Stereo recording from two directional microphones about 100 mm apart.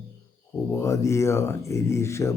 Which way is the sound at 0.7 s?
30° left (ahead or behind).